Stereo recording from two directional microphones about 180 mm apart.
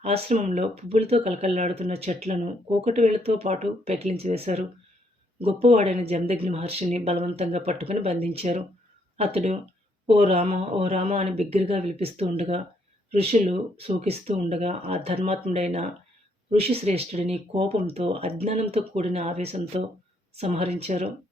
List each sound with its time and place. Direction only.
0.0 s speech: 35° right (ahead or behind)